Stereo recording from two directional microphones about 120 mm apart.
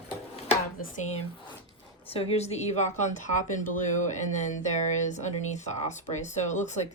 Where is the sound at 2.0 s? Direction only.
55° left (ahead or behind).